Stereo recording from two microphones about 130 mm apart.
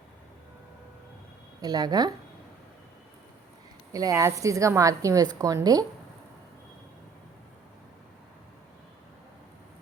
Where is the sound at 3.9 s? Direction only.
25° right (ahead or behind).